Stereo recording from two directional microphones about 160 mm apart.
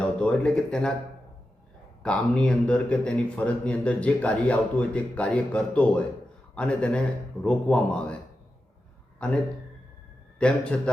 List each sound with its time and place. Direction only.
0.0 s speech: 5° left (ahead or behind)
2.0 s a man's voice: 5° left (ahead or behind)
9.1 s a man's voice: 5° left (ahead or behind)